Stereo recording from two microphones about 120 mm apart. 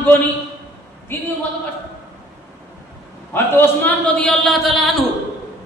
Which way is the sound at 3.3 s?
20° left (ahead or behind).